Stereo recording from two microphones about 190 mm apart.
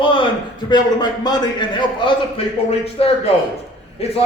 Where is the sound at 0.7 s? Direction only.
20° left (ahead or behind).